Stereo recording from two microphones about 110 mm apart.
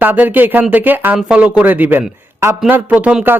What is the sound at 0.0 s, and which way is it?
Speech, 15° right (ahead or behind).